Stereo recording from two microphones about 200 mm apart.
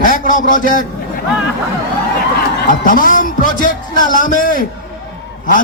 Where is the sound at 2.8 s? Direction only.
40° left (ahead or behind).